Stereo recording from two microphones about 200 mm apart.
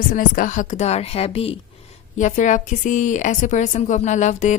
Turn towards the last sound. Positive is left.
turn(degrees=35)  # may be behind; listen again after turning